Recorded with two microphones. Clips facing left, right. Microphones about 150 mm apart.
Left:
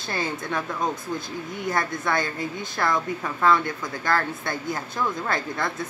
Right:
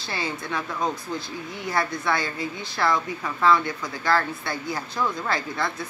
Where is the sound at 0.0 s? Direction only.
45° left (ahead or behind).